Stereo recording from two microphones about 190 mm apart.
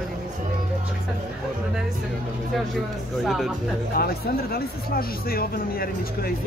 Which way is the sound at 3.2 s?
Centre (ahead or behind).